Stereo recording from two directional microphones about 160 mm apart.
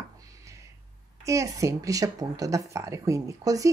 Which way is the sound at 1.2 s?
20° right (ahead or behind).